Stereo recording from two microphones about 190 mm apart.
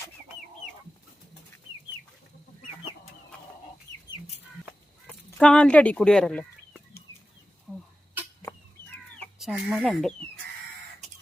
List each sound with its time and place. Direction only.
5.0 s chicken: 5° left (ahead or behind)
7.7 s a sound: 5° right (ahead or behind)
9.4 s speech: 5° right (ahead or behind)